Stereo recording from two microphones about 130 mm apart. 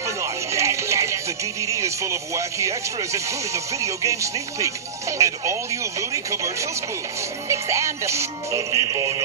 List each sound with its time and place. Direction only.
0.0 s speech: 20° right (ahead or behind)